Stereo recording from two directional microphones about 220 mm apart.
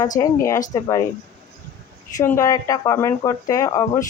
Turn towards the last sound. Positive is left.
turn(degrees=15)  # may be behind; listen again after turning